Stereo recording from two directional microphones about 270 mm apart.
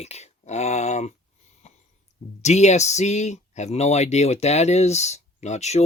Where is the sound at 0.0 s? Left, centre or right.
Left.